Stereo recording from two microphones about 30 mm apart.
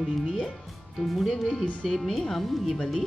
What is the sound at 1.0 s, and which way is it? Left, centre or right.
Speech, centre.